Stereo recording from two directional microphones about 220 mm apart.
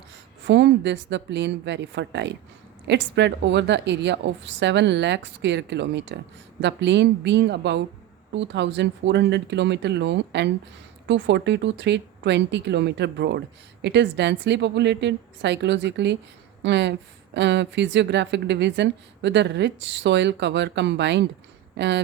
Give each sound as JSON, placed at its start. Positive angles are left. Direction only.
{"t": 0.4, "sound": "speech", "side_deg": -55}